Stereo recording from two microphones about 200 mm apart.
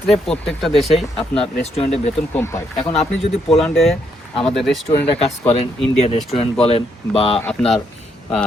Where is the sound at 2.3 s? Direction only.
10° left (ahead or behind).